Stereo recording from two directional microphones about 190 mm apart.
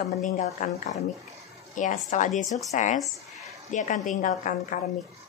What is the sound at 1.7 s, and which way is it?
A woman's voice, 40° left (ahead or behind).